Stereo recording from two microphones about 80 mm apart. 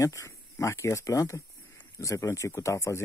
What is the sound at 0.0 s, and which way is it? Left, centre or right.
Speech, left.